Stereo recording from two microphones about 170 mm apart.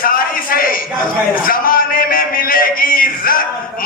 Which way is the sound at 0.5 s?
55° left (ahead or behind).